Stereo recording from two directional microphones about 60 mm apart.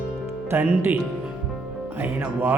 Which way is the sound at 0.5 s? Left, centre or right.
Right.